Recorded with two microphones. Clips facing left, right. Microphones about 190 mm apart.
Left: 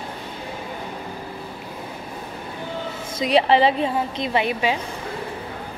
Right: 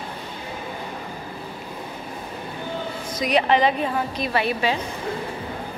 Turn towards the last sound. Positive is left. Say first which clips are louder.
# left 1 dB
turn(degrees=15)  # may be behind; listen again after turning